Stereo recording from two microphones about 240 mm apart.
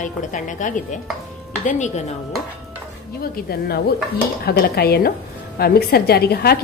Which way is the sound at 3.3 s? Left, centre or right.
Left.